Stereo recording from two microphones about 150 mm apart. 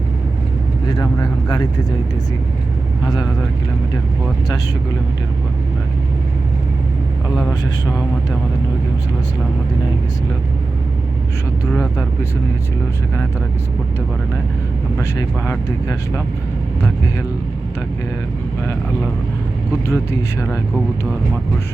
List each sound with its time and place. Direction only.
0.9 s speech: 25° left (ahead or behind)
14.9 s speech: 20° left (ahead or behind)
19.9 s speech: 20° left (ahead or behind)